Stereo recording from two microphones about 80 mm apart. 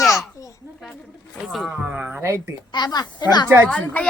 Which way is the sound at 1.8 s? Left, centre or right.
Centre.